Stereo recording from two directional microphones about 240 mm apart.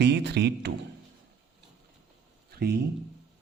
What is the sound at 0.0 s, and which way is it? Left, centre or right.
Speech, right.